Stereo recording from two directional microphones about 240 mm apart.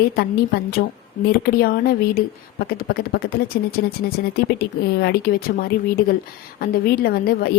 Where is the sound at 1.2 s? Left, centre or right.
Left.